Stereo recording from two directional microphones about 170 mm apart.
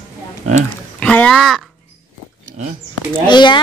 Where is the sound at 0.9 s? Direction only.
5° left (ahead or behind).